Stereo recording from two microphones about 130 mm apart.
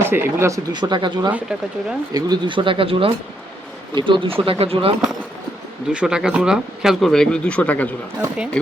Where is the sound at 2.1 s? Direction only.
30° right (ahead or behind); by 5.0 s 45° right (ahead or behind).